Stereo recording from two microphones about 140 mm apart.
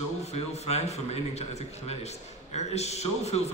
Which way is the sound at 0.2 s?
50° left (ahead or behind).